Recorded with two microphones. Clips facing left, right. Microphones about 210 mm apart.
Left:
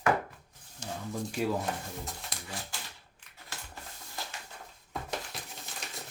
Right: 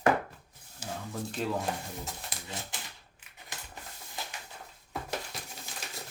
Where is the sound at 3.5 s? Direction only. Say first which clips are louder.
Even; 15° right (ahead or behind).